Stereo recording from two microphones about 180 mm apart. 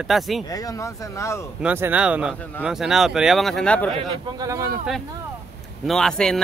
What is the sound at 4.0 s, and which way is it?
Speech, 25° right (ahead or behind).